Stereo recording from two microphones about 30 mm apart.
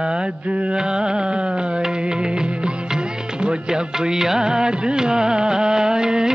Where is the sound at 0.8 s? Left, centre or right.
Right.